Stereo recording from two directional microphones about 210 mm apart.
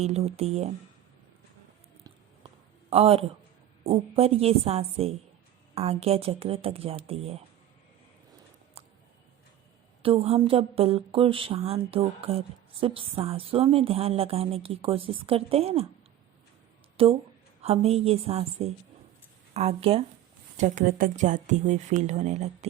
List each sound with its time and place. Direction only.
0.0 s speech: 30° right (ahead or behind)
2.9 s speech: 25° right (ahead or behind)
10.0 s speech: 25° right (ahead or behind)
17.0 s speech: 25° right (ahead or behind)
20.6 s speech: 40° right (ahead or behind)